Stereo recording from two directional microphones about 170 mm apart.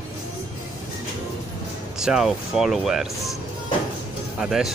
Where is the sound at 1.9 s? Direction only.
5° right (ahead or behind).